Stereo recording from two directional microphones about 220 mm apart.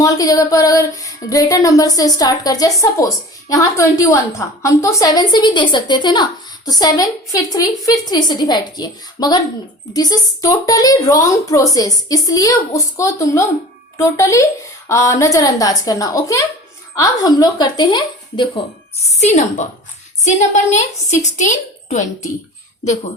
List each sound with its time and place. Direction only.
0.0 s a woman's voice: 15° left (ahead or behind)
19.2 s a woman's voice: 30° left (ahead or behind)